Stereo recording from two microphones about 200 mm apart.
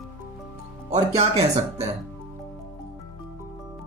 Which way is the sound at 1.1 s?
30° right (ahead or behind).